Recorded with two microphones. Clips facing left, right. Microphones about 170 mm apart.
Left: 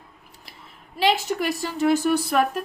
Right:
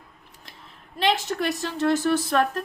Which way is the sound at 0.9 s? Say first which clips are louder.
Left 2 dB; 10° left (ahead or behind).